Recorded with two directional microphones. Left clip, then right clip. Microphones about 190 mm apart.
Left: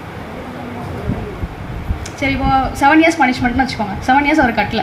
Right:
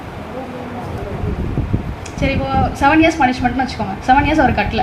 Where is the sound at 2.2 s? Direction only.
40° left (ahead or behind).